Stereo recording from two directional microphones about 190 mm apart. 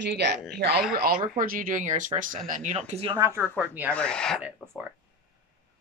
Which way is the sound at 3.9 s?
5° left (ahead or behind).